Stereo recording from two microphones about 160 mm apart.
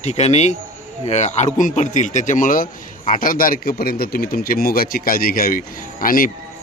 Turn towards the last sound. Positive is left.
turn(degrees=60)  # may be behind; listen again after turning